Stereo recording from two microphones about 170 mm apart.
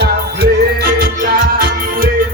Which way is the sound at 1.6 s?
55° right (ahead or behind).